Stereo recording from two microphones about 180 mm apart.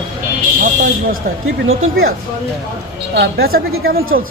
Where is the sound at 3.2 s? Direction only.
60° right (ahead or behind).